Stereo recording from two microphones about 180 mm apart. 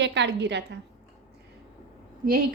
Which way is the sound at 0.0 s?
75° right (ahead or behind).